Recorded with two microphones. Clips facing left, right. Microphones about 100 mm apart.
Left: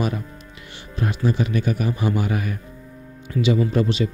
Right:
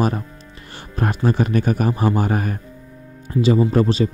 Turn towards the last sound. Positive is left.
turn(degrees=-40)  # may be behind; listen again after turning